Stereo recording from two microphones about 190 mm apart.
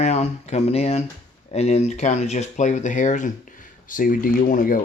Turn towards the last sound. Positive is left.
turn(degrees=45)  # may be behind; listen again after turning